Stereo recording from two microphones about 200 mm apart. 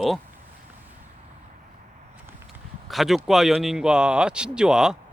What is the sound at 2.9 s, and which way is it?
Speech, centre (ahead or behind).